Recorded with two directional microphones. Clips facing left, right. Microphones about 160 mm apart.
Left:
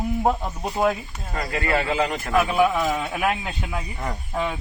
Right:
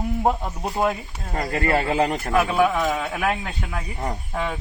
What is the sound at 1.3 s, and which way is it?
Speech, 40° right (ahead or behind).